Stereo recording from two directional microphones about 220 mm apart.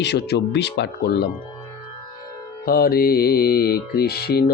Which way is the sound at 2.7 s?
40° left (ahead or behind).